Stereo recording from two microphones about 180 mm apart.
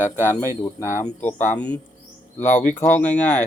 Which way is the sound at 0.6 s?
15° left (ahead or behind).